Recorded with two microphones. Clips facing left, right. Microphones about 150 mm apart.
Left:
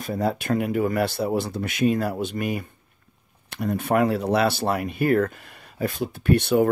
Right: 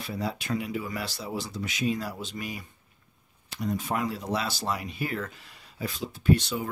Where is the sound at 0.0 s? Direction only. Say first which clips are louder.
Left 8 dB; 50° left (ahead or behind).